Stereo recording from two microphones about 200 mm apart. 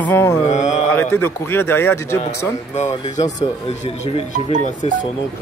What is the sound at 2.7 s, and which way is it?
Speech, 35° left (ahead or behind).